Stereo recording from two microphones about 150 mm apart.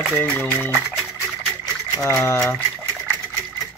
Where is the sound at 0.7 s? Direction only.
5° right (ahead or behind).